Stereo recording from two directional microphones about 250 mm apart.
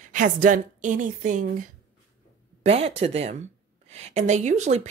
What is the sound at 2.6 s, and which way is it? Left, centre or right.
A woman's voice, right.